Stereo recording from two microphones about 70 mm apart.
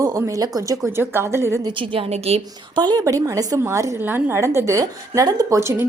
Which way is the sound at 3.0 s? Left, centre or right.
Right.